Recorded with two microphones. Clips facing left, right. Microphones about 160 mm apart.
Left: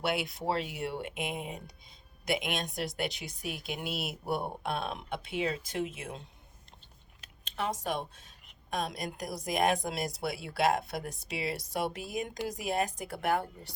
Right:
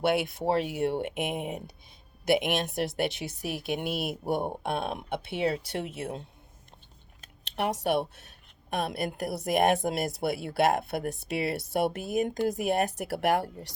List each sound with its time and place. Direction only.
0.1 s speech: 55° right (ahead or behind)
1.9 s a sound: 60° right (ahead or behind)
2.7 s speech: 60° right (ahead or behind)
5.3 s speech: 65° right (ahead or behind)
7.5 s speech: 65° right (ahead or behind); by 13.7 s 85° right